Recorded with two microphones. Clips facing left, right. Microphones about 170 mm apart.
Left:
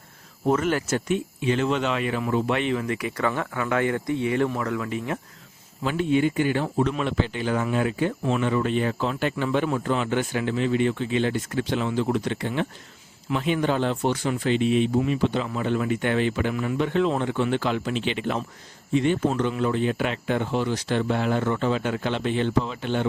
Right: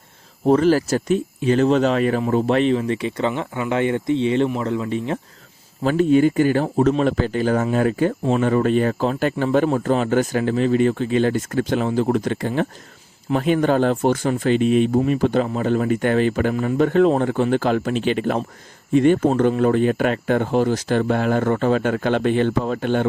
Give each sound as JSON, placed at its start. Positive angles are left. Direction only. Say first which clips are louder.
{"t": 0.4, "sound": "speech", "louder": "right 7 dB", "side_deg": -30}
{"t": 5.8, "sound": "a man's voice", "louder": "right 7 dB", "side_deg": -40}